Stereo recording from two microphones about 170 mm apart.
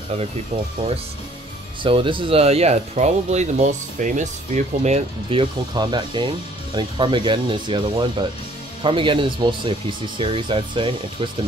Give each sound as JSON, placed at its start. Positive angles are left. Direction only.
{"t": 1.8, "sound": "speech", "side_deg": -30}